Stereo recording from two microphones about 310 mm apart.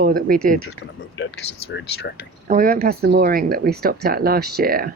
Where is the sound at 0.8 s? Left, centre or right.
Left.